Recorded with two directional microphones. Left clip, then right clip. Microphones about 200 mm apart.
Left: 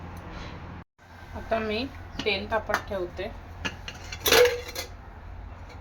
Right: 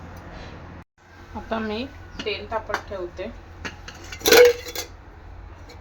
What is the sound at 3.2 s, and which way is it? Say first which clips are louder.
Speech: right 2 dB; centre (ahead or behind).